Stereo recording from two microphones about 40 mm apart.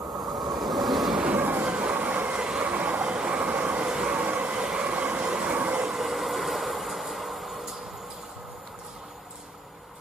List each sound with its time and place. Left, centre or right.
0.6 s vehicle: centre
1.2 s vehicle: right
1.7 s train: right
2.3 s vehicle: right
2.7 s vehicle: right
4.1 s train: right
4.6 s train: right
5.9 s vehicle: centre